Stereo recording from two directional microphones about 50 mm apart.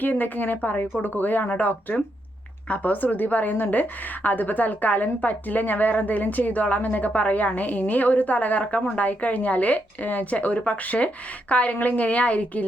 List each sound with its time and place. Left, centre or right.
0.0 s a woman's voice: left